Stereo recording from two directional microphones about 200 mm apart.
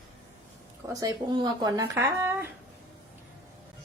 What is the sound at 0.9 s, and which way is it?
Speech, 20° right (ahead or behind).